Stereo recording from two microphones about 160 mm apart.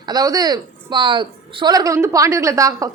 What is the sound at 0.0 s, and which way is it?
A woman's voice, 25° right (ahead or behind).